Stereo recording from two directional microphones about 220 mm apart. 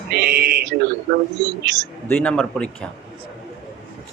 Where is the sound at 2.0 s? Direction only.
5° left (ahead or behind).